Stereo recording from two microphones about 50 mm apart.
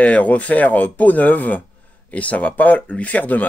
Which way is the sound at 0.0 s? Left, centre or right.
Left.